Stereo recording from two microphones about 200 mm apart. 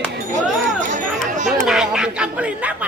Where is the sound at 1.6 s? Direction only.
5° right (ahead or behind).